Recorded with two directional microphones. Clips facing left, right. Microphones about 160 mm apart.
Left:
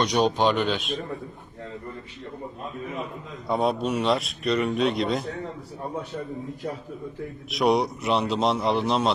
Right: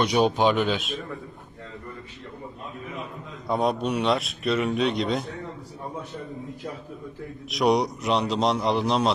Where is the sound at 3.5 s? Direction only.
Centre (ahead or behind).